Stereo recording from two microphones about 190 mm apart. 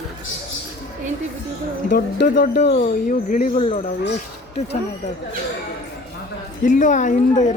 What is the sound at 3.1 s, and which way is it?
Speech, 40° left (ahead or behind).